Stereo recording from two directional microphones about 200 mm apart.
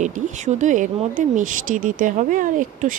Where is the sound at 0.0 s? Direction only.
35° right (ahead or behind).